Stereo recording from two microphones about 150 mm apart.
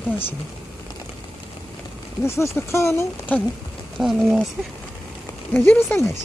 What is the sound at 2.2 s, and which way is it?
Speech, 20° left (ahead or behind).